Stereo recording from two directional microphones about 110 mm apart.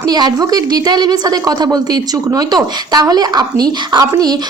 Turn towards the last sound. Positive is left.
turn(degrees=-35)  # may be behind; listen again after turning